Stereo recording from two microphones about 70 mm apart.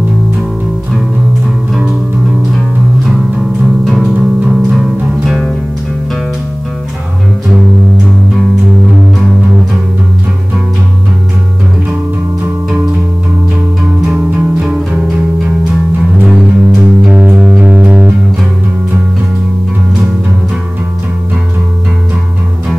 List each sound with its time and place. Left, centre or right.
3.8 s music: centre
14.0 s music: centre
16.3 s music: centre